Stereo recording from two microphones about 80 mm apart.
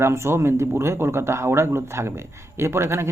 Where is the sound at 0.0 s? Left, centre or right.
Right.